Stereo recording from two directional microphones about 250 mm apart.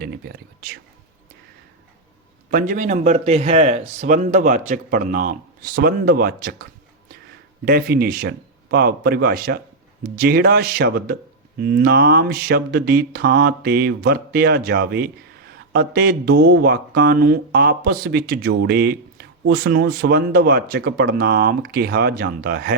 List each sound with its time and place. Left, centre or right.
2.5 s mantra: right